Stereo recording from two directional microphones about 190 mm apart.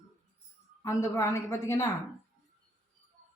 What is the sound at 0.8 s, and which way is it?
A woman's voice, 15° left (ahead or behind).